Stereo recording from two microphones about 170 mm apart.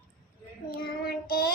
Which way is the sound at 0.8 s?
65° left (ahead or behind).